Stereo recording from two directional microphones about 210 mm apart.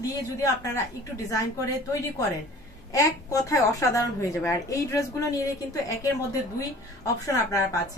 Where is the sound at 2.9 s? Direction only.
15° left (ahead or behind).